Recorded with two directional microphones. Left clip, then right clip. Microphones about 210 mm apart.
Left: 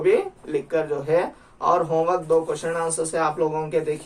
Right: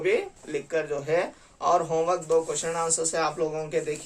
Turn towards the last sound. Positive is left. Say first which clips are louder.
# left 5 dB
turn(degrees=-20)  # may be behind; listen again after turning